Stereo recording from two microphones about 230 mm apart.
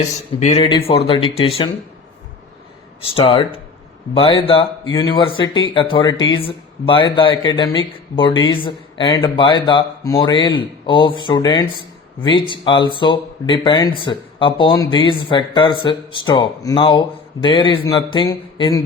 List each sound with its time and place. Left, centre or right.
0.3 s speech: left
3.0 s speech: left